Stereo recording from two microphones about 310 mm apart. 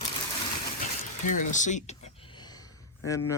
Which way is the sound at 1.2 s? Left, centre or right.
Left.